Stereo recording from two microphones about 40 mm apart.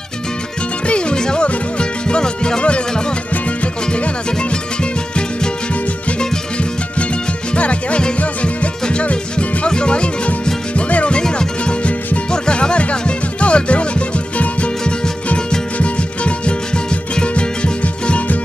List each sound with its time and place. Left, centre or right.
0.8 s music: left
7.5 s music: left